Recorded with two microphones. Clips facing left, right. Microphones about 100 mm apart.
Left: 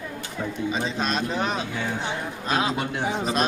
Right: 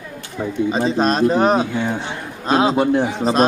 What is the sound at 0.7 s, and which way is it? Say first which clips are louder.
Speech: right 10 dB; 40° right (ahead or behind).